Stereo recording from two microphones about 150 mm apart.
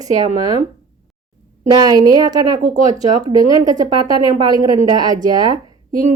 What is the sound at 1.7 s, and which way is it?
Speech, 25° right (ahead or behind).